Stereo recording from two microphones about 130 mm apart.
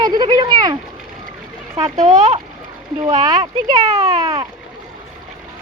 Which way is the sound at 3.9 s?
30° right (ahead or behind).